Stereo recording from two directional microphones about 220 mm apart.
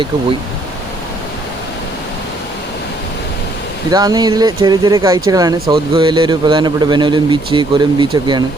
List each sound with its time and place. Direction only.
3.8 s speech: 15° right (ahead or behind)